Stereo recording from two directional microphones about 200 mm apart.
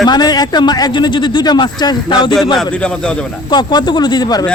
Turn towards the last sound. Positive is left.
turn(degrees=20)  # may be behind; listen again after turning